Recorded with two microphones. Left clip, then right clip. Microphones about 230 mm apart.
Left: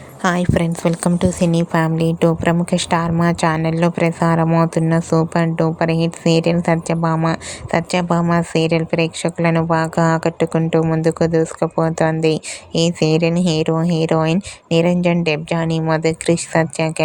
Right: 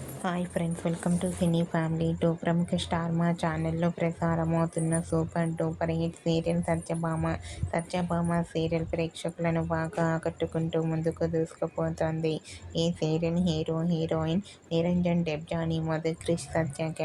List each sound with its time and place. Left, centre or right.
0.2 s a woman's voice: left